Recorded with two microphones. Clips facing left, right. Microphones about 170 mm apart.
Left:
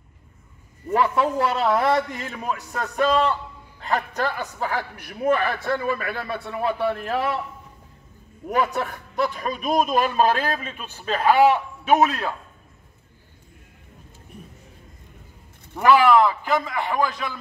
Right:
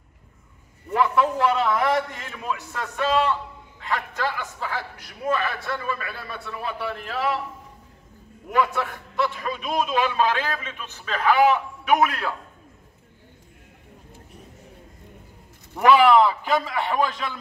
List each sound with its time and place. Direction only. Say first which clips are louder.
1.1 s a man's voice: right 1 dB; 35° left (ahead or behind)
8.5 s a man's voice: even; 45° left (ahead or behind); by 12.3 s 25° left (ahead or behind)
15.8 s a man's voice: even; centre (ahead or behind)